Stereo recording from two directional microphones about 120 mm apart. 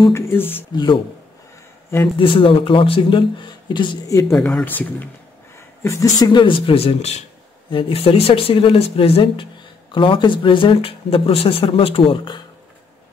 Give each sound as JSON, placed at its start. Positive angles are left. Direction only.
{"t": 0.1, "sound": "speech", "side_deg": 20}
{"t": 0.7, "sound": "speech", "side_deg": 40}
{"t": 2.1, "sound": "speech", "side_deg": 45}
{"t": 4.3, "sound": "speech", "side_deg": 5}
{"t": 5.9, "sound": "speech", "side_deg": 30}
{"t": 7.7, "sound": "speech", "side_deg": 50}